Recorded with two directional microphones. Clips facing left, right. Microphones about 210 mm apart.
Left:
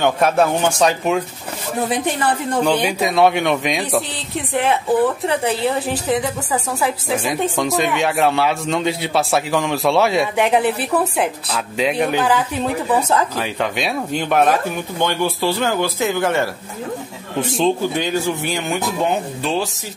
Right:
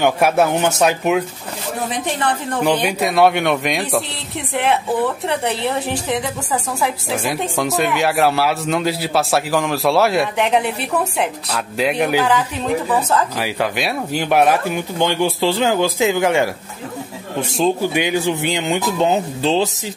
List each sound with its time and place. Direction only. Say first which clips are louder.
0.0 s speech: right 1 dB; 10° right (ahead or behind)
2.8 s speech: right 1 dB; centre (ahead or behind)
13.4 s speech: right 1 dB; 5° right (ahead or behind)
17.4 s speech: even; centre (ahead or behind)
17.9 s speech: right 2 dB; 15° right (ahead or behind)